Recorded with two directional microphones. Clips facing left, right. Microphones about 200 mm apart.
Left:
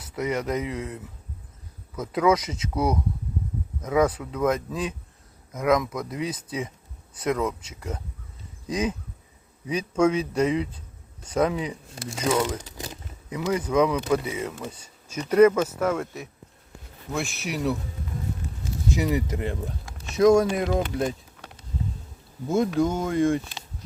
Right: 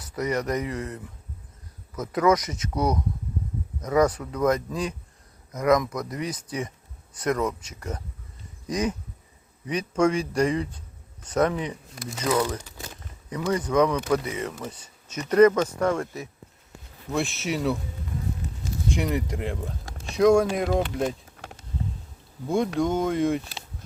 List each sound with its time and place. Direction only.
0.2 s speech: 5° left (ahead or behind)
11.9 s speech: 30° left (ahead or behind)
13.3 s speech: 10° left (ahead or behind)
18.9 s speech: 5° left (ahead or behind)
22.4 s speech: centre (ahead or behind)